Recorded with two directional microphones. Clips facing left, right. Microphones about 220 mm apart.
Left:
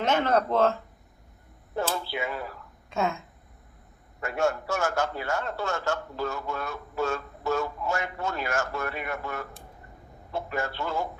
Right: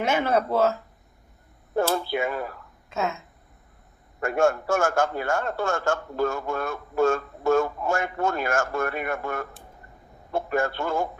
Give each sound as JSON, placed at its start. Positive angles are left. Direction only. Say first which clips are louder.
{"t": 0.0, "sound": "speech", "louder": "right 1 dB", "side_deg": -10}
{"t": 1.7, "sound": "a man's voice", "louder": "right 6 dB", "side_deg": -50}
{"t": 2.9, "sound": "speech", "louder": "even", "side_deg": 0}
{"t": 4.2, "sound": "a man's voice", "louder": "right 5 dB", "side_deg": -50}